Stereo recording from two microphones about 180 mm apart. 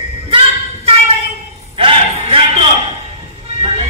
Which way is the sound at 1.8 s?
30° right (ahead or behind).